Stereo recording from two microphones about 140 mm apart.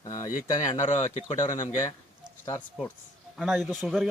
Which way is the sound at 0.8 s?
60° left (ahead or behind).